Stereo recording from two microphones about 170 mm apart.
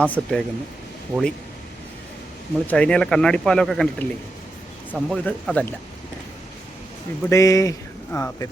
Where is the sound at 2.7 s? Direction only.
5° left (ahead or behind).